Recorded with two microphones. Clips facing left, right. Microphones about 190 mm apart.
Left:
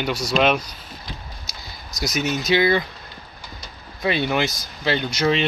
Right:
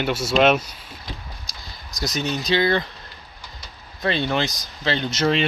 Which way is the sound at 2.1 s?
20° left (ahead or behind).